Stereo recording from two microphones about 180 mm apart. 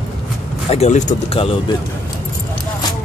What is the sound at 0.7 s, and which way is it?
Speech, 40° left (ahead or behind).